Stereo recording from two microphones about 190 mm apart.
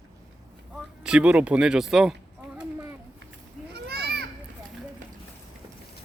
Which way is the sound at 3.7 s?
55° right (ahead or behind).